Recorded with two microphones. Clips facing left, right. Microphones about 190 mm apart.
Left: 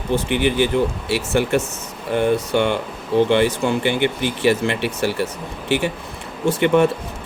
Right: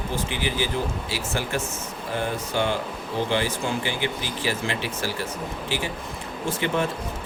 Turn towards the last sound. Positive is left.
turn(degrees=65)  # may be behind; listen again after turning